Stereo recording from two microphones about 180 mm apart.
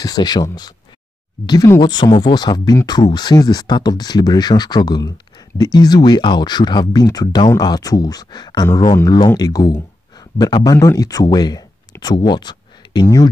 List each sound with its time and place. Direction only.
0.0 s speech: 20° left (ahead or behind)